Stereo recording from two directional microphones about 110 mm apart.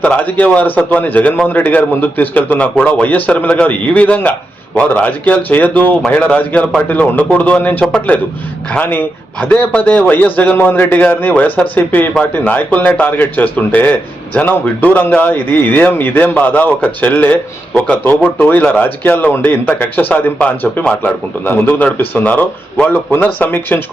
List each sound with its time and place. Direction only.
0.0 s speech: 15° left (ahead or behind)